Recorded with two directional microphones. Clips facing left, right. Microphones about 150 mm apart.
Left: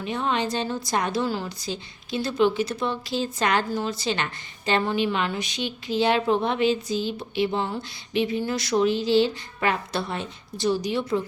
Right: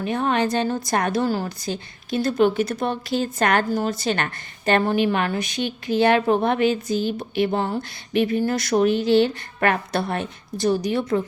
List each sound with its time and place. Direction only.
0.0 s a woman's voice: 50° right (ahead or behind)